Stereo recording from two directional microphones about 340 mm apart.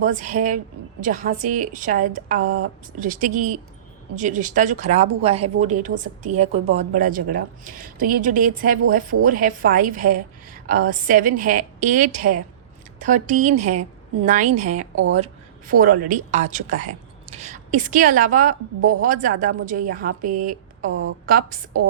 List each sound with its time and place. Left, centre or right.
0.0 s a woman's voice: right
20.2 s speech: right
20.9 s a woman's voice: right